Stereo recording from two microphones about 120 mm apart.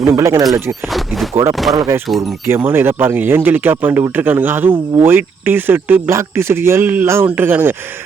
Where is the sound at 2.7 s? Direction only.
20° right (ahead or behind).